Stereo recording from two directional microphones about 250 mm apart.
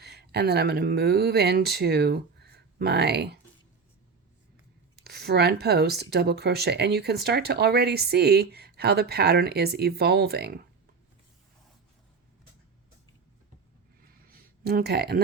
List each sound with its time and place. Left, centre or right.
0.0 s speech: right
4.9 s speech: right
14.3 s a sound: right